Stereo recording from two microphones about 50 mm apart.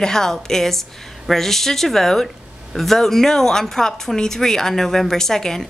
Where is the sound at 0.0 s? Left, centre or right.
Centre.